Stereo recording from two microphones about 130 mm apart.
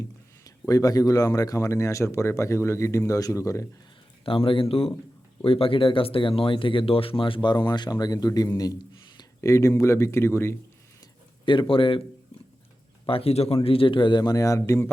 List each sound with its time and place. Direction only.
0.0 s a man's voice: 25° left (ahead or behind)
4.3 s speech: 40° left (ahead or behind); by 10.6 s 20° left (ahead or behind)
11.7 s speech: 40° left (ahead or behind)
13.1 s speech: 45° left (ahead or behind); by 14.8 s 25° left (ahead or behind)